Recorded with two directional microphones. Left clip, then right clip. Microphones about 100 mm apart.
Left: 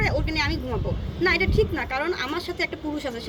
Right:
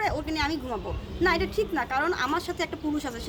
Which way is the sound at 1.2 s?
40° right (ahead or behind).